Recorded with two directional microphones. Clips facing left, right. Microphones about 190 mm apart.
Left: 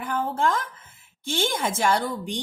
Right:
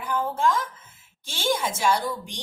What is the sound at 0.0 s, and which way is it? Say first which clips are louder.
Speech: even; 55° left (ahead or behind).